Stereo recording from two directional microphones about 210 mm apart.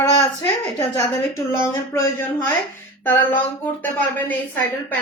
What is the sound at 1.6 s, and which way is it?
Speech, 10° left (ahead or behind).